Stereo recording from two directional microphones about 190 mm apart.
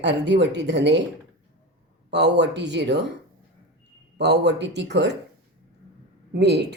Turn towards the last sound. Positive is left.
turn(degrees=-60)  # may be behind; listen again after turning